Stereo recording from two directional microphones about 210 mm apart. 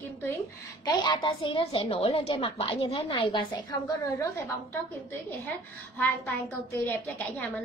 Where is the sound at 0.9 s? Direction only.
20° left (ahead or behind).